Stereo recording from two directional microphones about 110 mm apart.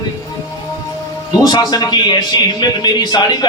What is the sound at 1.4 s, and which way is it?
A man's voice, 40° left (ahead or behind).